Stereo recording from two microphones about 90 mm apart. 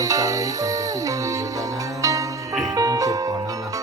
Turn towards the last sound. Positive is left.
turn(degrees=-45)  # may be behind; listen again after turning